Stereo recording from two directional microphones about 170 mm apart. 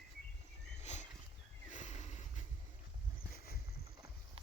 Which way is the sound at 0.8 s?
40° left (ahead or behind).